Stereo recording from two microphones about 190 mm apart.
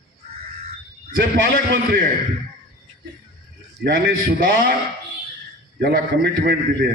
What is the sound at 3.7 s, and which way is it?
Speech, 60° right (ahead or behind).